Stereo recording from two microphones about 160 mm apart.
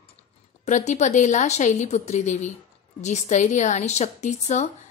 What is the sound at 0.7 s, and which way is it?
A woman's voice, 45° left (ahead or behind).